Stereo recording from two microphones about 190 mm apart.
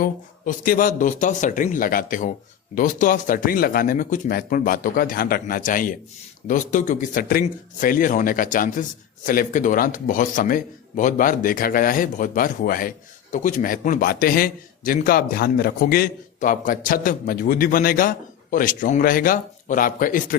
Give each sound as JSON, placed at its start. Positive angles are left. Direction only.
{"t": 0.0, "sound": "a man's voice", "side_deg": 50}